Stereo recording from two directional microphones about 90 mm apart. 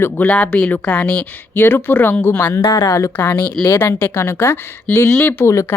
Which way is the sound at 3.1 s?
20° left (ahead or behind).